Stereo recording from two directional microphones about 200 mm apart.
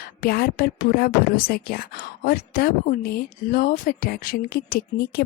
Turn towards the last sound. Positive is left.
turn(degrees=50)  # may be behind; listen again after turning